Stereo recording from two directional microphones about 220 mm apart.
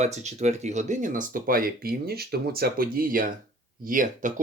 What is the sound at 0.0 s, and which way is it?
Speech, 30° right (ahead or behind).